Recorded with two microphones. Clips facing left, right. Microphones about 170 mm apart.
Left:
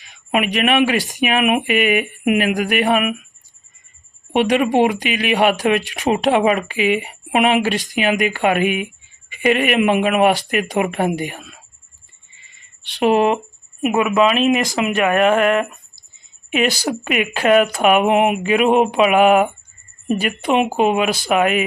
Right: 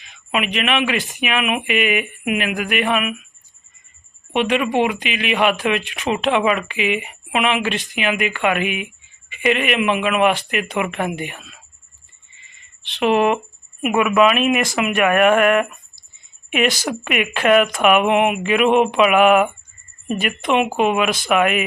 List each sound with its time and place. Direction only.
0.1 s speech: 40° left (ahead or behind)
4.3 s speech: 40° left (ahead or behind)
13.0 s speech: 35° left (ahead or behind)